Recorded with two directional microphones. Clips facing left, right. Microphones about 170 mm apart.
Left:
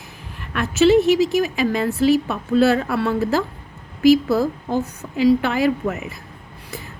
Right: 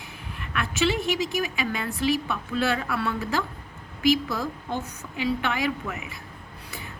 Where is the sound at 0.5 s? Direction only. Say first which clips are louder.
Left 11 dB; 40° left (ahead or behind).